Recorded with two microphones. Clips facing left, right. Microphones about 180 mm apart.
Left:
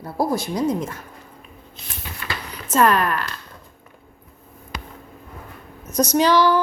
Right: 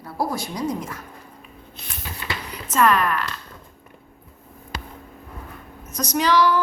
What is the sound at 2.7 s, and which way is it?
Speech, 35° left (ahead or behind).